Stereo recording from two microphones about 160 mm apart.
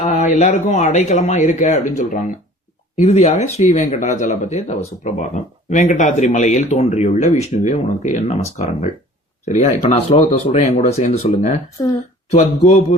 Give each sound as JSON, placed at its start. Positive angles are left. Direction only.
{"t": 0.0, "sound": "speech", "side_deg": 45}
{"t": 11.8, "sound": "a woman's voice", "side_deg": 25}
{"t": 12.3, "sound": "speech", "side_deg": 45}